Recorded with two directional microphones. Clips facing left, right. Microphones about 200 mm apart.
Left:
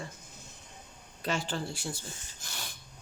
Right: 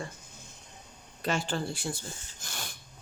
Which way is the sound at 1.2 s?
55° right (ahead or behind).